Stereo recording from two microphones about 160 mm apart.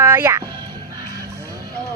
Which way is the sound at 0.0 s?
15° right (ahead or behind).